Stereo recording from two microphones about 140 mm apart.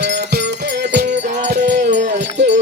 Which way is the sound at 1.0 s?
60° right (ahead or behind).